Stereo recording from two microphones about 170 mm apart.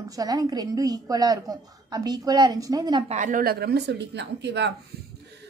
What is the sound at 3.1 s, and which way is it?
A woman's voice, 50° right (ahead or behind).